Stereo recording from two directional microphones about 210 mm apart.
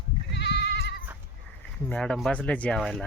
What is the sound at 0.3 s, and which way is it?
Goat, 55° left (ahead or behind).